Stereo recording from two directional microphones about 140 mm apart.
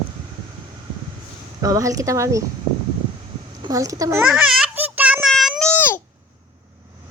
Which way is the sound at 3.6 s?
25° right (ahead or behind).